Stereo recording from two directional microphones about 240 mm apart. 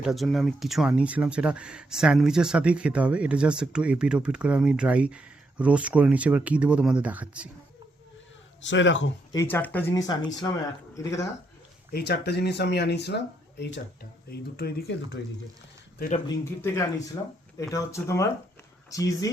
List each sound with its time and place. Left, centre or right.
0.0 s speech: centre
8.6 s speech: left
9.3 s speech: centre
11.9 s speech: left
16.1 s speech: centre